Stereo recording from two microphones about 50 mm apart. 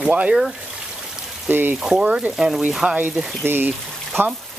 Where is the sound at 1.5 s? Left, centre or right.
Right.